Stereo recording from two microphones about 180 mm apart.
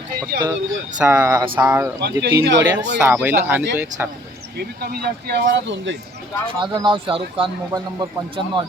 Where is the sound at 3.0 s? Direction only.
10° right (ahead or behind).